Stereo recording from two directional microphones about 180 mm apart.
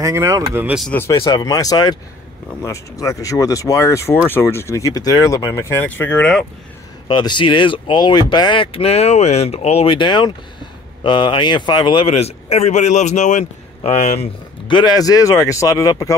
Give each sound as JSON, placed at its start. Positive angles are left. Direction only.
{"t": 0.0, "sound": "speech", "side_deg": -15}
{"t": 0.7, "sound": "speech", "side_deg": 10}
{"t": 1.1, "sound": "a man's voice", "side_deg": 25}
{"t": 7.1, "sound": "speech", "side_deg": 25}
{"t": 14.7, "sound": "a man's voice", "side_deg": 25}